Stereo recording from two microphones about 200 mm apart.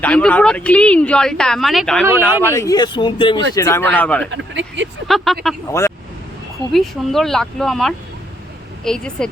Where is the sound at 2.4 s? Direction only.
15° left (ahead or behind).